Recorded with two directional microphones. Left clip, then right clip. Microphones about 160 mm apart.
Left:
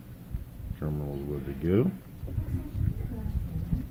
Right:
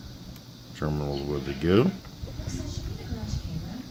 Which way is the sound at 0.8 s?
30° right (ahead or behind).